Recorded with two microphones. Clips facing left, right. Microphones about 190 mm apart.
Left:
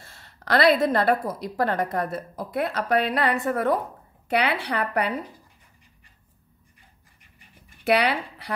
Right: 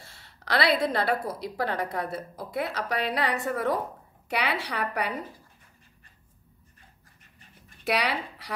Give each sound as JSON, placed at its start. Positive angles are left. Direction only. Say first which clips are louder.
{"t": 0.0, "sound": "a woman's voice", "louder": "left 3 dB", "side_deg": 50}
{"t": 7.8, "sound": "speech", "louder": "left 6 dB", "side_deg": 60}